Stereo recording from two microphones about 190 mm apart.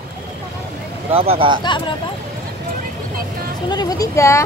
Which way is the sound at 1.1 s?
30° right (ahead or behind).